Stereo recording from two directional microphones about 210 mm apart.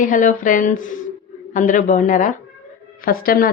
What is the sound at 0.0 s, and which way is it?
Speech, 40° left (ahead or behind).